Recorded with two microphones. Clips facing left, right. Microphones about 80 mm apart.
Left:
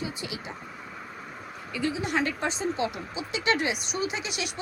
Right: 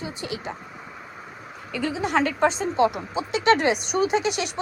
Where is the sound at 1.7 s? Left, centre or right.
Right.